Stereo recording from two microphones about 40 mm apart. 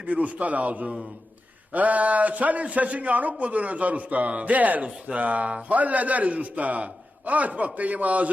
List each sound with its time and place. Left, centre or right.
0.0 s a man's voice: right